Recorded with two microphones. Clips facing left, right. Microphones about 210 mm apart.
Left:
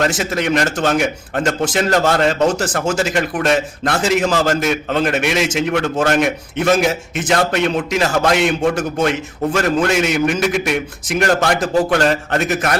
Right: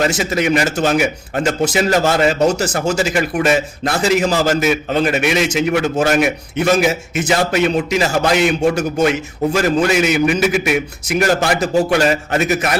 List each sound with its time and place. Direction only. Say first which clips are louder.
0.0 s a man's voice: right 1 dB; centre (ahead or behind)